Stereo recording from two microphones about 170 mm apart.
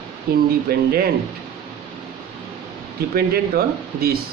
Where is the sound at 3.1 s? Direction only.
65° right (ahead or behind).